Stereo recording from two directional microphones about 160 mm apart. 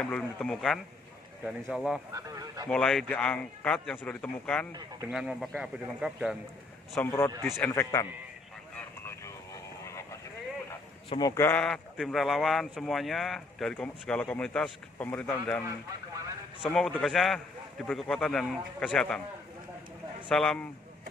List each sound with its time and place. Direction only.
0.0 s speech: 5° left (ahead or behind)
2.1 s speech: 20° right (ahead or behind)
2.7 s speech: 5° left (ahead or behind)
7.0 s speech: 15° left (ahead or behind)
8.7 s vehicle: 15° left (ahead or behind)
11.1 s speech: 20° left (ahead or behind)
16.7 s speech: 5° left (ahead or behind)
20.2 s speech: 5° left (ahead or behind)